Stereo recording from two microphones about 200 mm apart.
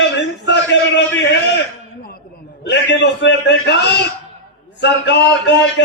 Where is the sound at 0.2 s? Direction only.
60° left (ahead or behind).